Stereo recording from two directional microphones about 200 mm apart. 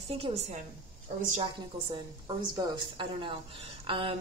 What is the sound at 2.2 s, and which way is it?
Speech, 25° right (ahead or behind).